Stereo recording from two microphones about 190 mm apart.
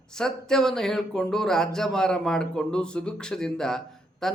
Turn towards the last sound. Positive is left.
turn(degrees=0)  # may be behind; listen again after turning